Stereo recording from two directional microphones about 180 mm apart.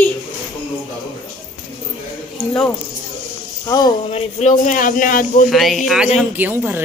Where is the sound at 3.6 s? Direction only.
25° left (ahead or behind).